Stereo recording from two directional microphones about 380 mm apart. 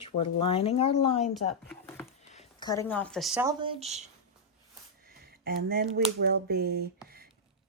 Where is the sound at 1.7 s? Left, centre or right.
Centre.